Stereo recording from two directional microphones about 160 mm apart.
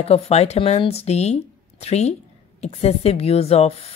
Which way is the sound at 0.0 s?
40° left (ahead or behind).